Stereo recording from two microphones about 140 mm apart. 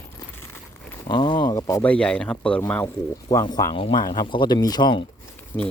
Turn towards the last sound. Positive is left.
turn(degrees=15)  # may be behind; listen again after turning